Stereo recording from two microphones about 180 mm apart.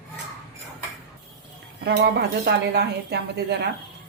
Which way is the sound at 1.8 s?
65° right (ahead or behind).